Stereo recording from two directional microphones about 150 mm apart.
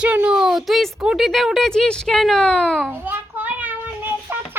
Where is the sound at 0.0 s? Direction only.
10° right (ahead or behind).